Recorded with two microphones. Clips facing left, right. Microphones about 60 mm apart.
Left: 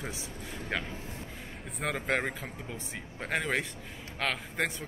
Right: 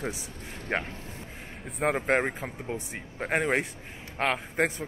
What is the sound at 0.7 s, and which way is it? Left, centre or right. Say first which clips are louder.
Speech: right 5 dB; right.